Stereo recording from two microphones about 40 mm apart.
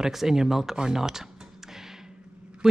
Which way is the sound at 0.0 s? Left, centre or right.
Centre.